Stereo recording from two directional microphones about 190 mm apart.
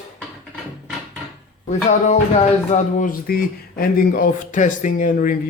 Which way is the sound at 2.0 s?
35° left (ahead or behind).